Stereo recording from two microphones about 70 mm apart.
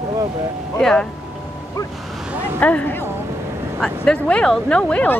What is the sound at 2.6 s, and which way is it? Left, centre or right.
Speech, left.